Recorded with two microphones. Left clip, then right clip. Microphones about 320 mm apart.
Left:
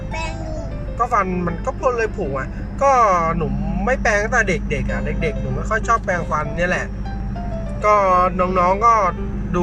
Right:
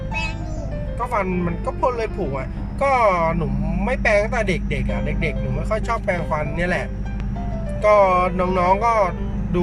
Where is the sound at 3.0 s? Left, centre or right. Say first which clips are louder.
Left 2 dB; centre.